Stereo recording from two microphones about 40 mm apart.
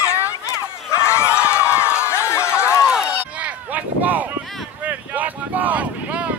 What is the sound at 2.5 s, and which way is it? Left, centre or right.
Run, left.